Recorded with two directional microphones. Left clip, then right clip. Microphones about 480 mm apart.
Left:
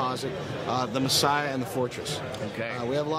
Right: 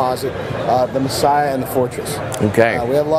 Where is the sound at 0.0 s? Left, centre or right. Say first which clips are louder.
Right 11 dB; centre.